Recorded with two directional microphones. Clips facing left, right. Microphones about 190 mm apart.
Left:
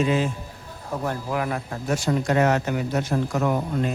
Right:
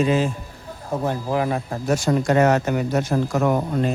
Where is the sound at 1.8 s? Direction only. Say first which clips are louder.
Right 3 dB; 45° right (ahead or behind).